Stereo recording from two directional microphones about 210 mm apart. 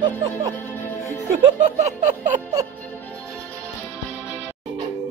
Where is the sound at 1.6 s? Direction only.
35° right (ahead or behind).